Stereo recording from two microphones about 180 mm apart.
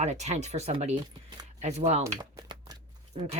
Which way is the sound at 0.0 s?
40° right (ahead or behind).